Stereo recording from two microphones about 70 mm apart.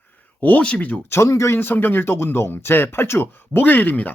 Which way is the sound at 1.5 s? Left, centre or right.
Left.